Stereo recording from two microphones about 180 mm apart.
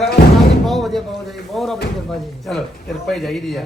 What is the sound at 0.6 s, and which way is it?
Slam, centre (ahead or behind).